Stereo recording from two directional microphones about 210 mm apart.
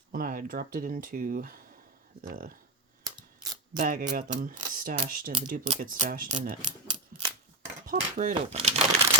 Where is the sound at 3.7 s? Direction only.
40° right (ahead or behind).